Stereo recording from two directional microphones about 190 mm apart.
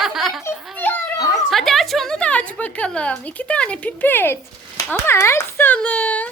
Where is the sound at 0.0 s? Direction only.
Centre (ahead or behind).